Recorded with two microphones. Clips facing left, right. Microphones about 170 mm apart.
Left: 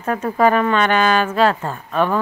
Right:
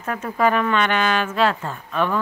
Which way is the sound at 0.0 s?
40° left (ahead or behind).